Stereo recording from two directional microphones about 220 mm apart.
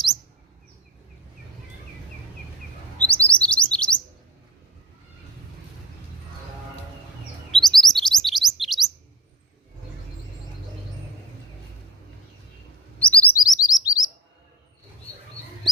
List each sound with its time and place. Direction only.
3.0 s chirp: 5° left (ahead or behind)
7.5 s chirp: centre (ahead or behind)
13.0 s chirp: 5° left (ahead or behind)
13.3 s chirp: 15° left (ahead or behind)